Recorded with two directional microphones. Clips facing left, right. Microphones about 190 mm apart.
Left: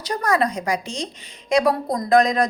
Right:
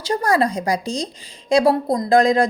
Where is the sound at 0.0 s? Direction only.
30° right (ahead or behind).